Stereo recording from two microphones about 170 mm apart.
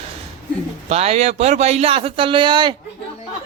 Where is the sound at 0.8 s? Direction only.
40° right (ahead or behind).